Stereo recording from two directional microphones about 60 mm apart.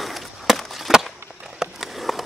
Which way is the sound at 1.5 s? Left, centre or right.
Centre.